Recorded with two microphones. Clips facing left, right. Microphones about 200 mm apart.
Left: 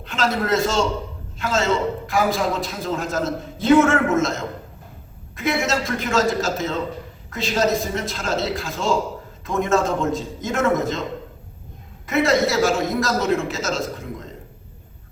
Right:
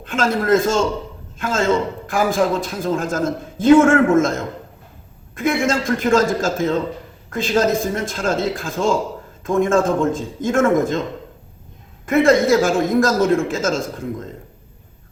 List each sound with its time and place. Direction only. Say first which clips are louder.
0.0 s a man's voice: right 3 dB; 50° right (ahead or behind)
5.4 s a man's voice: right 3 dB; 50° right (ahead or behind)
12.0 s a man's voice: right 5 dB; 50° right (ahead or behind)